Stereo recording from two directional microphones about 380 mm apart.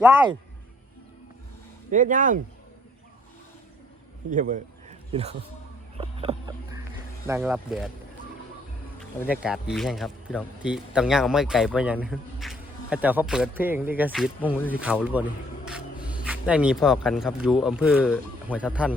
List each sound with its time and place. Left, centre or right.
1.9 s speech: centre
4.3 s a man's voice: centre
6.0 s a sound: centre
7.3 s speech: centre
9.4 s speech: centre